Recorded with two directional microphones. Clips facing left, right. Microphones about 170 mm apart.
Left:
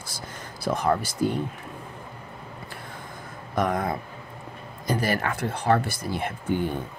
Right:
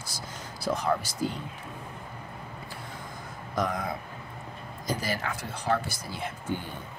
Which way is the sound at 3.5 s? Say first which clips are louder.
Left 5 dB; 55° left (ahead or behind).